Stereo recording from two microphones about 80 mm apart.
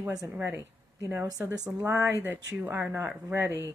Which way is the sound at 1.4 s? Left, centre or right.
Centre.